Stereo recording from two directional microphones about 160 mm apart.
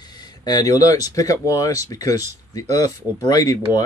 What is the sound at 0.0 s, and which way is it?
Speech, 25° left (ahead or behind).